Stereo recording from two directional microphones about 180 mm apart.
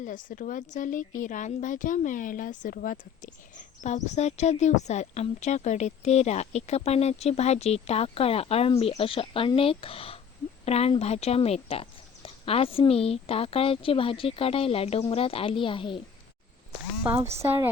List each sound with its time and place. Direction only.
0.0 s speech: 45° left (ahead or behind); by 16.0 s 30° left (ahead or behind)
17.4 s a woman's voice: 15° right (ahead or behind)